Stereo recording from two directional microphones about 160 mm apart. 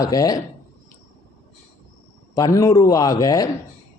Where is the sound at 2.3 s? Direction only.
20° left (ahead or behind).